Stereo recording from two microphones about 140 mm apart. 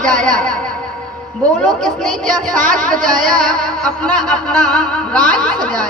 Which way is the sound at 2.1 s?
70° right (ahead or behind).